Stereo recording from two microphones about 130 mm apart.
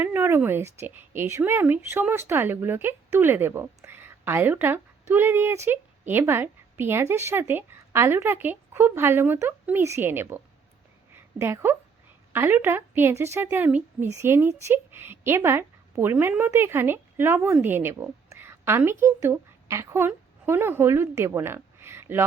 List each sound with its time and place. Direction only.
0.0 s a woman's voice: 15° right (ahead or behind)